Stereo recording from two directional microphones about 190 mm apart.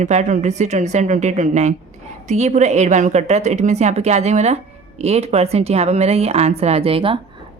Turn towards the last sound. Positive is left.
turn(degrees=-30)  # may be behind; listen again after turning